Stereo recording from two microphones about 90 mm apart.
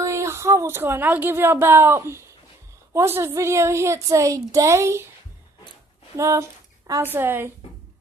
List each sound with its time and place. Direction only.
0.0 s a woman's voice: 35° right (ahead or behind)
6.1 s a woman's voice: 35° right (ahead or behind)
7.0 s a woman's voice: 25° right (ahead or behind)